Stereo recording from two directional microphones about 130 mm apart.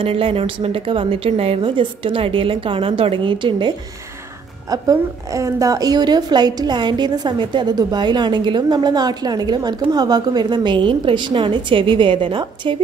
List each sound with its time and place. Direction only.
0.0 s a woman's voice: 45° right (ahead or behind)
4.6 s a woman's voice: 25° right (ahead or behind)